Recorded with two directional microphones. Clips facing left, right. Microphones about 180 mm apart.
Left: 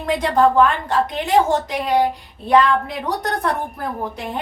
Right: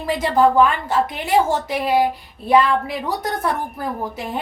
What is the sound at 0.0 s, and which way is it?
A woman's voice, 5° right (ahead or behind).